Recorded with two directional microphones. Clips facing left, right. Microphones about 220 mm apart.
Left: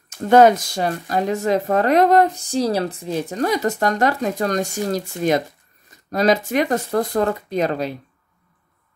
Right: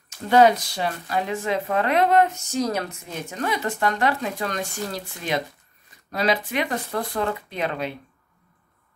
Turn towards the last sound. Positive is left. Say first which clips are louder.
# left 6 dB
turn(degrees=40)  # may be behind; listen again after turning